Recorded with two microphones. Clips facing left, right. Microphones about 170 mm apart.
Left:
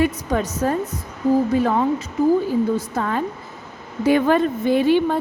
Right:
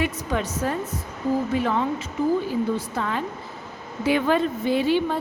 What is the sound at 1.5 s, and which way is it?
A woman's voice, 40° left (ahead or behind).